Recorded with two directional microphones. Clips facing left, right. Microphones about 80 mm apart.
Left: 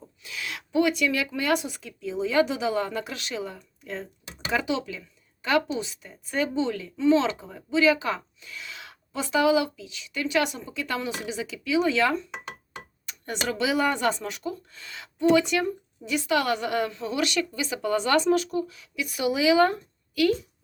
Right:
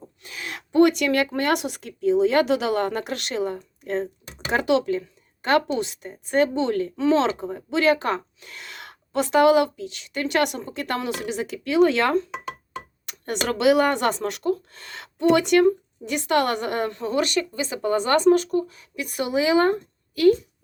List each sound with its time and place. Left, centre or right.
0.2 s speech: right
13.1 s a sound: right
13.5 s a woman's voice: right